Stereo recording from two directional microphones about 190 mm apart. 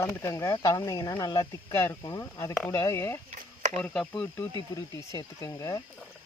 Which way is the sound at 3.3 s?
40° right (ahead or behind).